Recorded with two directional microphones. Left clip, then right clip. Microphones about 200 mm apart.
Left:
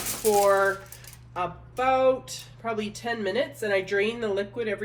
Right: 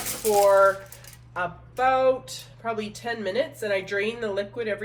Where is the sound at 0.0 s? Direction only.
10° left (ahead or behind).